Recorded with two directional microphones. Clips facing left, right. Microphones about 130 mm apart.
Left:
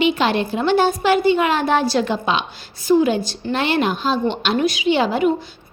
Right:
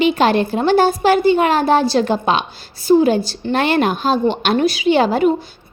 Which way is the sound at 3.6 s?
50° right (ahead or behind).